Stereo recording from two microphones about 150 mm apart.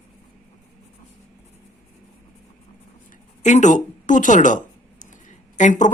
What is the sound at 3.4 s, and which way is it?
A woman's voice, 55° left (ahead or behind).